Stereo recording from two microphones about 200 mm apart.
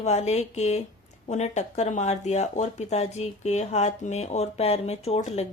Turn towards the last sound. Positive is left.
turn(degrees=35)  # may be behind; listen again after turning